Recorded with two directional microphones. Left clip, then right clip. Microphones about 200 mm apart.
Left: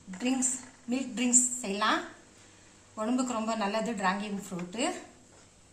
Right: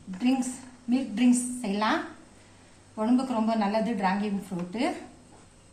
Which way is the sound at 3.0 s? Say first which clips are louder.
Right 4 dB; 30° left (ahead or behind).